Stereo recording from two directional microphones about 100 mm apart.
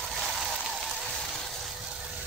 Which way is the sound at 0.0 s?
Centre (ahead or behind).